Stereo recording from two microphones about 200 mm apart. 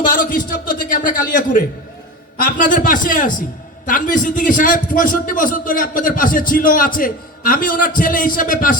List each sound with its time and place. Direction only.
0.0 s a man's voice: 45° left (ahead or behind)